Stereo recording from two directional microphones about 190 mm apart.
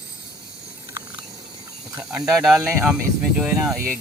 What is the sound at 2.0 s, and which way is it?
Speech, 5° right (ahead or behind).